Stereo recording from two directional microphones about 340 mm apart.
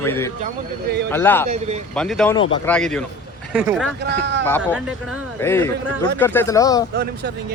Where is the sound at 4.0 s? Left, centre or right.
Right.